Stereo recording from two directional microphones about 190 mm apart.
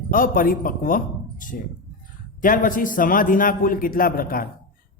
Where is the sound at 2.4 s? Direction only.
45° left (ahead or behind).